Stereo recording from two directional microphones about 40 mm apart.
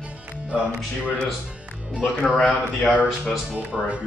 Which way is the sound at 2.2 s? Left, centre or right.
Centre.